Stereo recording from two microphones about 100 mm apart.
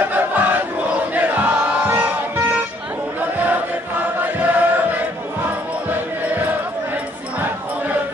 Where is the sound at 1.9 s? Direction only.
20° right (ahead or behind).